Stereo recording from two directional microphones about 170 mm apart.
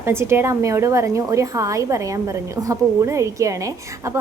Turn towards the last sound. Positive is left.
turn(degrees=-20)  # may be behind; listen again after turning